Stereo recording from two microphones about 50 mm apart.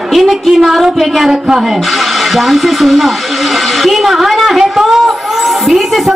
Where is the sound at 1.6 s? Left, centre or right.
Centre.